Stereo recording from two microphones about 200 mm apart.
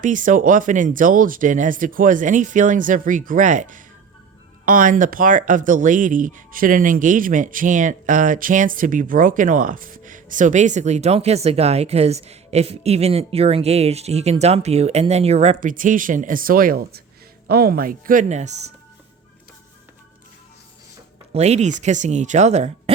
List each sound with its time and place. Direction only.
0.0 s speech: 40° right (ahead or behind)
21.3 s speech: 35° right (ahead or behind)